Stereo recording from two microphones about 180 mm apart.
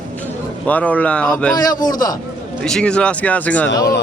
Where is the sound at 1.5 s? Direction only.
20° left (ahead or behind).